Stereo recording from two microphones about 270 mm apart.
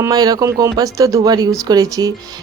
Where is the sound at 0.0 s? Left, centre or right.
Centre.